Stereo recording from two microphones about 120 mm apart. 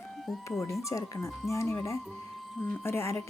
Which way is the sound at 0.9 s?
25° left (ahead or behind).